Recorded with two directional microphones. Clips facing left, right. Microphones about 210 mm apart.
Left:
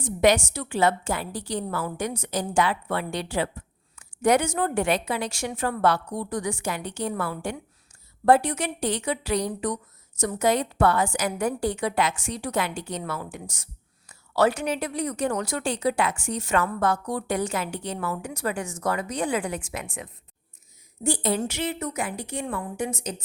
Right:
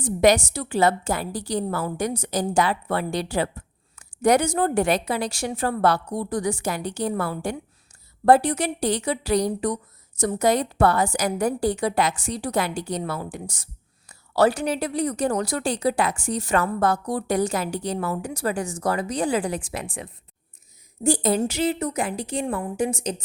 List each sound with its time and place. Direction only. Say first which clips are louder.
0.0 s a woman's voice: right 2 dB; 35° right (ahead or behind)